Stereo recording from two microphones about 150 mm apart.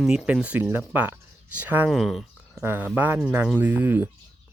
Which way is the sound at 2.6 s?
15° right (ahead or behind).